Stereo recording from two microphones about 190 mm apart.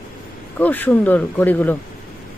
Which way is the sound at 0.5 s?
10° left (ahead or behind).